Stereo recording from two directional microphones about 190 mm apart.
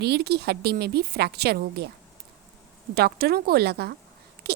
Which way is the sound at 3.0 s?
55° right (ahead or behind).